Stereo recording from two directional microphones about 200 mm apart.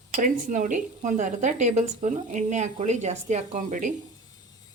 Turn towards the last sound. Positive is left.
turn(degrees=-40)  # may be behind; listen again after turning